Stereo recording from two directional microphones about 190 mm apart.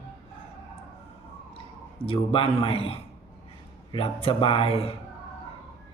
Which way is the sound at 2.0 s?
30° left (ahead or behind).